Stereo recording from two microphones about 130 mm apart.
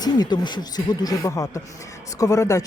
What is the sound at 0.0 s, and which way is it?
A man's voice, 30° left (ahead or behind).